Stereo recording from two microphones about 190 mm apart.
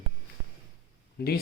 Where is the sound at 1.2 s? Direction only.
55° left (ahead or behind).